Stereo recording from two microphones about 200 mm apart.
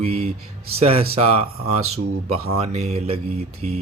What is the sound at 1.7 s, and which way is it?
Speech, 90° right.